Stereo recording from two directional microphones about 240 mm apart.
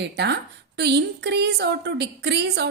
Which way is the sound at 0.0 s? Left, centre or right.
Right.